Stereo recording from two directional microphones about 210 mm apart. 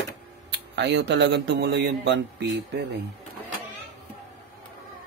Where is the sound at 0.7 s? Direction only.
55° right (ahead or behind).